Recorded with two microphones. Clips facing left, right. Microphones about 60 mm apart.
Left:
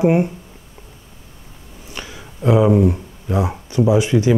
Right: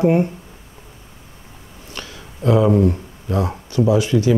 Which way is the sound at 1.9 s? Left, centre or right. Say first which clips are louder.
Left 1 dB; centre.